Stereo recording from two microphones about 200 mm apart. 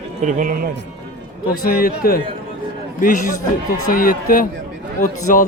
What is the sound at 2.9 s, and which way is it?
Speech, 40° left (ahead or behind).